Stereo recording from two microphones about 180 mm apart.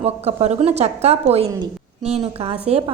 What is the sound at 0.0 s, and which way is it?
A woman's voice, 35° right (ahead or behind).